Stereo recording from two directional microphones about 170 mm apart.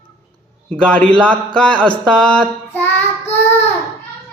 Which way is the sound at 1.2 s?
5° left (ahead or behind).